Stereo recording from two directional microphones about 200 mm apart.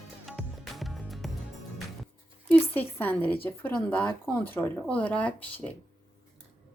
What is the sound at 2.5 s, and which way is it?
Speech, 10° left (ahead or behind).